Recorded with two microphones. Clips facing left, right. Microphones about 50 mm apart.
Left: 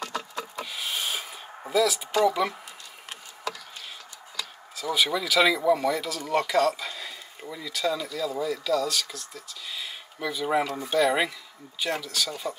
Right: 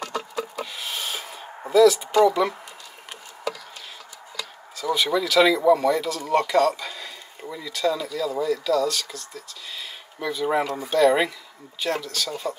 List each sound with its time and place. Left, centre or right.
0.0 s a sound: centre
1.7 s speech: centre
4.4 s speech: centre